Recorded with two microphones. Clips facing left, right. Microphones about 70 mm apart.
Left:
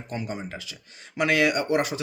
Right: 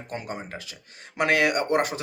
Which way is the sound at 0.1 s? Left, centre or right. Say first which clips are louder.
Left 1 dB; right.